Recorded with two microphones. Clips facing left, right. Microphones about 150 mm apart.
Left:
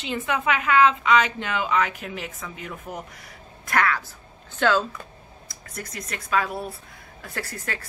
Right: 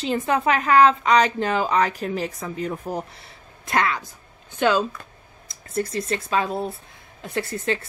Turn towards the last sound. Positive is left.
turn(degrees=-25)  # may be behind; listen again after turning